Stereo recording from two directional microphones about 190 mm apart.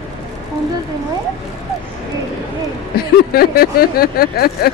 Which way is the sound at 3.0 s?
55° left (ahead or behind).